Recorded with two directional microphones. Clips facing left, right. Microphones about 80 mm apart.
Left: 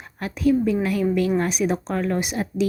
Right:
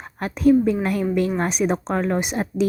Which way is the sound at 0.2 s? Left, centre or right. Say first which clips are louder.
Right 4 dB; right.